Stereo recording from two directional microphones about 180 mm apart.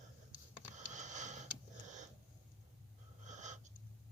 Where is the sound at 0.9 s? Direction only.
40° right (ahead or behind).